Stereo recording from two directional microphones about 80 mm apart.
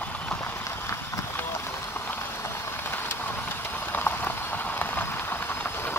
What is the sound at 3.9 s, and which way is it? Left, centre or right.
Rain on surface, left.